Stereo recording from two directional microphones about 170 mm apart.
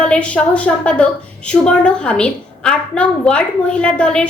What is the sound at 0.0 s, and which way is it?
A woman's voice, 5° left (ahead or behind).